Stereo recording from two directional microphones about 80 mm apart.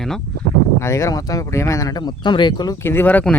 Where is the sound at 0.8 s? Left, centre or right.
Left.